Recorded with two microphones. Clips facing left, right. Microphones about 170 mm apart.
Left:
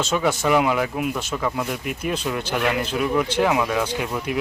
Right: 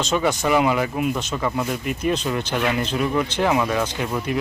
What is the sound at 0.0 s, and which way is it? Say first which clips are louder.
Speech: even; 5° left (ahead or behind).